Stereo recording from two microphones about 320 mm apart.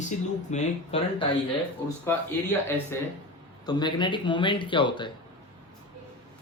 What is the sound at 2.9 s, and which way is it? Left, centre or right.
Speech, centre.